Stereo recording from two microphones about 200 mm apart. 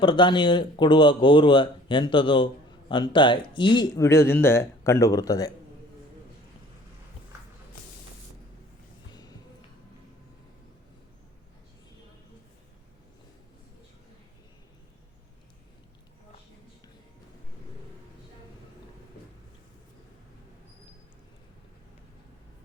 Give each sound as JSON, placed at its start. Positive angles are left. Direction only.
{"t": 0.0, "sound": "speech", "side_deg": 25}